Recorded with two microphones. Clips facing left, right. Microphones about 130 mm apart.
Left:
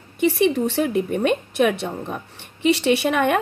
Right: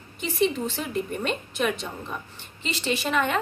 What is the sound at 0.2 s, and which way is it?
A woman's voice, 70° left (ahead or behind).